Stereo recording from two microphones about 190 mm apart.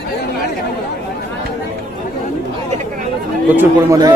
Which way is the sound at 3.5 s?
20° right (ahead or behind).